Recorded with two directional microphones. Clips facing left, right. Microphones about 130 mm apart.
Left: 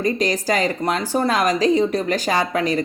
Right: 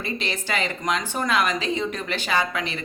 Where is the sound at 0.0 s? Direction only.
40° left (ahead or behind).